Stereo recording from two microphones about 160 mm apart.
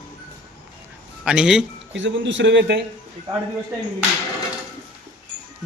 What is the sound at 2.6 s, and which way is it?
Speech, 90° right.